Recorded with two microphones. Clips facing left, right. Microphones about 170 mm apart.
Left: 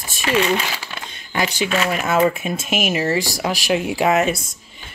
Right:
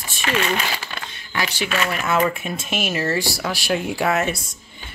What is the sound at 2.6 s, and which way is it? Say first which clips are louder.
Speech: left 3 dB; 10° left (ahead or behind).